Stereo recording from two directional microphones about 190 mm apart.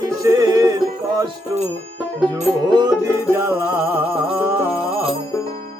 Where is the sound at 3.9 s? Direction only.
10° right (ahead or behind).